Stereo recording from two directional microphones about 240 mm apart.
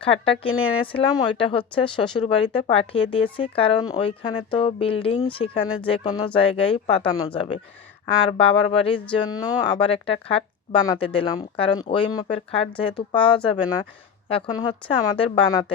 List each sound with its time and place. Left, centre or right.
0.0 s speech: left